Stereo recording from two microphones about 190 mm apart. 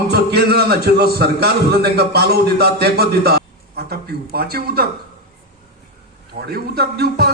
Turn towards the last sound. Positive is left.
turn(degrees=-55)  # may be behind; listen again after turning